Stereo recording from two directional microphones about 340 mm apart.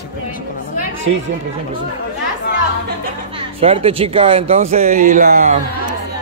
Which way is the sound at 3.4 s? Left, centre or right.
Centre.